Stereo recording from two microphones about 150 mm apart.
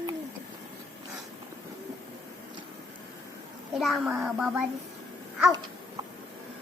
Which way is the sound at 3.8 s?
Centre (ahead or behind).